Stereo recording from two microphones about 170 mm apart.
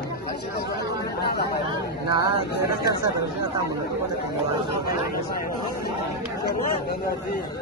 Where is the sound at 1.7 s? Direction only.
25° right (ahead or behind).